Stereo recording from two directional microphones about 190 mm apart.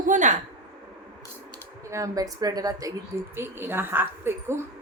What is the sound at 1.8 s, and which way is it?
A woman's voice, 15° right (ahead or behind).